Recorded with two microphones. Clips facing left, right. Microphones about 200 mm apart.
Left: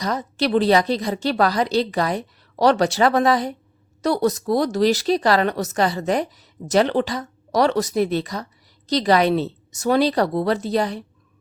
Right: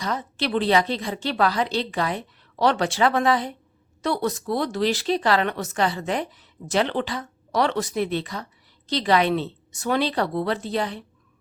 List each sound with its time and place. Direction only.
0.0 s speech: 40° left (ahead or behind)